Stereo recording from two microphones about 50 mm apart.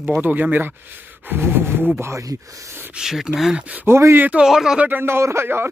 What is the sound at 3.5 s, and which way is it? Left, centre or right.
Speech, right.